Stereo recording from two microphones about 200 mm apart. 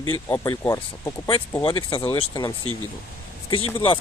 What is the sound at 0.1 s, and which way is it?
Speech, 15° left (ahead or behind).